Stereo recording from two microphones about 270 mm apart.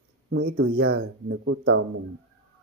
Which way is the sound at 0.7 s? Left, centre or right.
Right.